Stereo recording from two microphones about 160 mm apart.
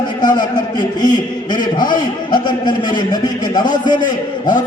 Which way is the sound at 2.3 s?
30° left (ahead or behind).